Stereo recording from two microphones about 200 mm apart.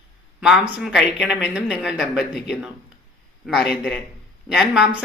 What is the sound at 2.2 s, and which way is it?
Speech, 55° left (ahead or behind).